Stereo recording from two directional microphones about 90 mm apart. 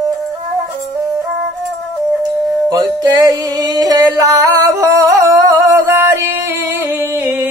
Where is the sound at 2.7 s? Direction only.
45° right (ahead or behind).